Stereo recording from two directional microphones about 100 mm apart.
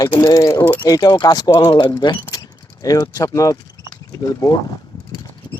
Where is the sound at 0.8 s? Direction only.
40° left (ahead or behind).